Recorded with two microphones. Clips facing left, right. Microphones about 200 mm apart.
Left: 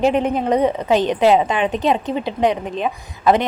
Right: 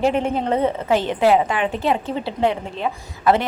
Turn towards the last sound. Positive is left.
turn(degrees=15)  # may be behind; listen again after turning